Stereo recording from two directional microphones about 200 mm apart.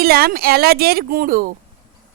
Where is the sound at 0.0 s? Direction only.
50° right (ahead or behind).